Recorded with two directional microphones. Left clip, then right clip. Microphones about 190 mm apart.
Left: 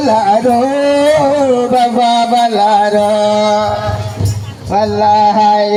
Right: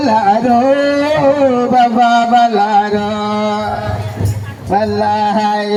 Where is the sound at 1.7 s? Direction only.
35° right (ahead or behind).